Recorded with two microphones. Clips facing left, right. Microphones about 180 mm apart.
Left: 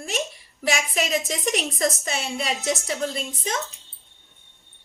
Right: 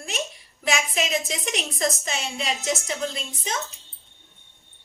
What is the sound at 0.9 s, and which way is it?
A woman's voice, 45° left (ahead or behind).